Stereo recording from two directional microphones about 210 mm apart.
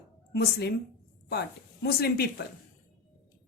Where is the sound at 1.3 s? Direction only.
50° left (ahead or behind).